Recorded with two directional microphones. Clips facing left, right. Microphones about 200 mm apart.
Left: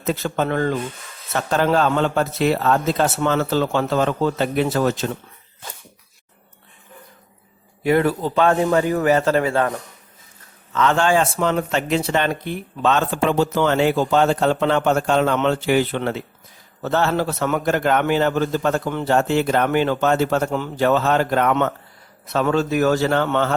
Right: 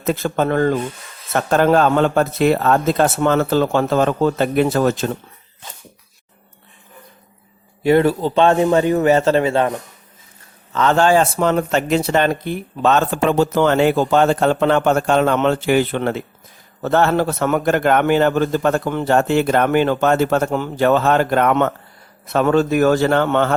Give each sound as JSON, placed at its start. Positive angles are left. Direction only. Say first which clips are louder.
{"t": 0.0, "sound": "speech", "louder": "right 3 dB", "side_deg": -50}
{"t": 7.9, "sound": "a man's voice", "louder": "right 4 dB", "side_deg": -30}
{"t": 10.7, "sound": "a man's voice", "louder": "right 3 dB", "side_deg": -35}